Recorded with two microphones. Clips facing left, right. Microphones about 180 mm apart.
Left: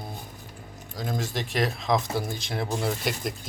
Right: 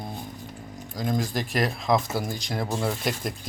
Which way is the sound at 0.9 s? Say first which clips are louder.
Right 4 dB; centre (ahead or behind).